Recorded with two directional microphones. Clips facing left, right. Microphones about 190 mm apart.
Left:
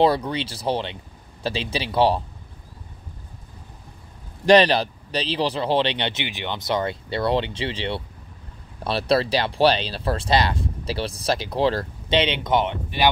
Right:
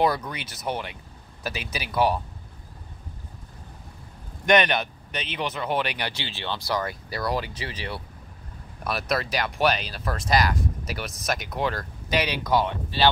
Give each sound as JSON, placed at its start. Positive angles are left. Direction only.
{"t": 0.0, "sound": "speech", "side_deg": 30}
{"t": 4.5, "sound": "speech", "side_deg": 30}